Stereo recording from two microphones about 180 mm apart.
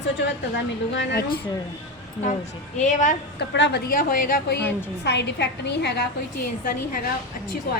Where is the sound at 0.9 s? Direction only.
65° left (ahead or behind).